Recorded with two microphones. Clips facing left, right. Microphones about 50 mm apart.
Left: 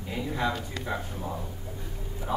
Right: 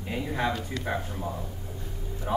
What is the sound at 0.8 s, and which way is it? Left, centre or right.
Speech, centre.